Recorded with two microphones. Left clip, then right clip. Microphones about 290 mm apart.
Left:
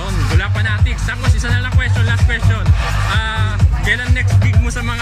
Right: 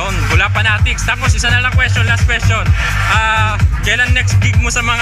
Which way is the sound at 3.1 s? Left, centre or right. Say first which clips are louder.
Right 10 dB; centre.